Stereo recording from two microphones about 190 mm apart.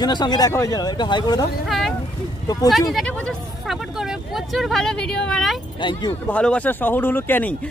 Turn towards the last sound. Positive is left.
turn(degrees=10)  # may be behind; listen again after turning